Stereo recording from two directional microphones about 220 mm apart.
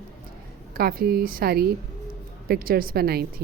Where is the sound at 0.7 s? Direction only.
45° right (ahead or behind).